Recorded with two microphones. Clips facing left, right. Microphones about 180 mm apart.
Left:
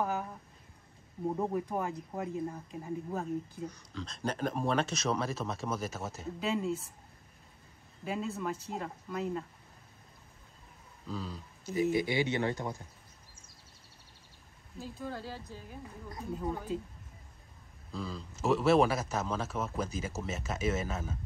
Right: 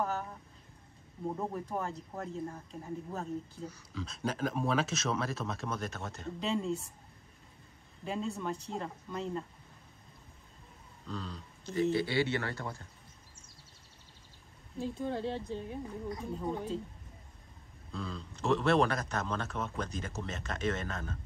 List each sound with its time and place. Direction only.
0.0 s a sound: 10° left (ahead or behind)
1.7 s speech: 15° left (ahead or behind)
2.7 s speech: centre (ahead or behind)
8.0 s speech: 5° left (ahead or behind)
11.1 s speech: 5° left (ahead or behind)
15.0 s speech: 25° right (ahead or behind)
16.3 s speech: 5° left (ahead or behind)
17.9 s speech: 5° left (ahead or behind)